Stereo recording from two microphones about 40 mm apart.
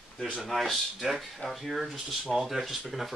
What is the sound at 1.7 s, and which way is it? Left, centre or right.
Speech, centre.